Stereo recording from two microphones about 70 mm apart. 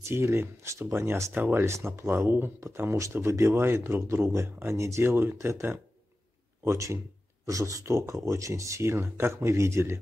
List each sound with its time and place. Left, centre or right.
0.1 s speech: right
1.3 s speech: right
5.0 s speech: right